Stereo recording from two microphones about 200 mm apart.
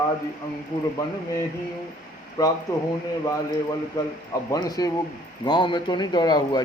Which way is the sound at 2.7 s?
15° left (ahead or behind).